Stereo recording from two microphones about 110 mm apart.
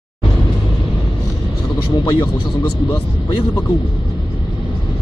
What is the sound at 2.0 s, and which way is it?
Speech, 45° left (ahead or behind).